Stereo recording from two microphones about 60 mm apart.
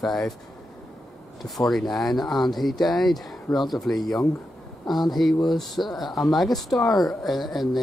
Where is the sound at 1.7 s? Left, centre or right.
Centre.